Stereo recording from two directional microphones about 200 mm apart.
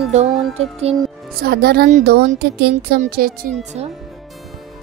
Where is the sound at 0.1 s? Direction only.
35° right (ahead or behind).